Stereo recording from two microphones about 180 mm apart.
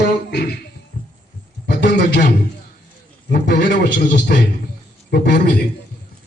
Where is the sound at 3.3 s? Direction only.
60° left (ahead or behind).